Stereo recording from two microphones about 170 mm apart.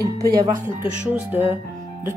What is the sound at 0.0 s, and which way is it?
Speech, 20° right (ahead or behind).